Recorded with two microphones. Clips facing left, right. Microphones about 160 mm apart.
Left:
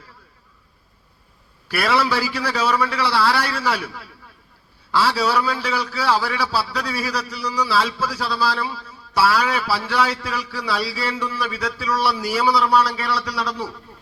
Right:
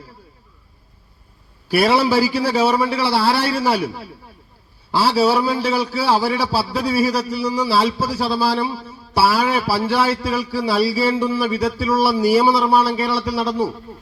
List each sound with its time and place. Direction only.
1.6 s a man's voice: 30° right (ahead or behind)